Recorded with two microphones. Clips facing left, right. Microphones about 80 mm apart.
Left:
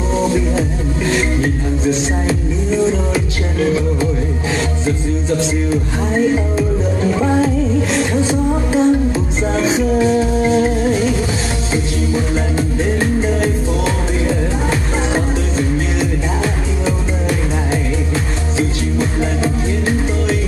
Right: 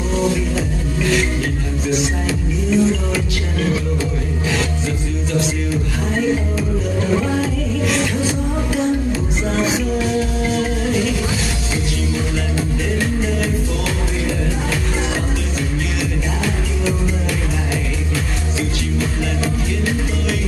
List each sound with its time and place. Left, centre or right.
0.3 s music: left
5.4 s music: left